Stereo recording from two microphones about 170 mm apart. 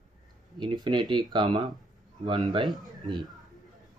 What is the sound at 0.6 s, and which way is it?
Speech, 25° right (ahead or behind).